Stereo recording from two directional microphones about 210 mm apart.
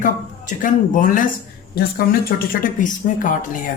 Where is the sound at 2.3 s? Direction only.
45° left (ahead or behind).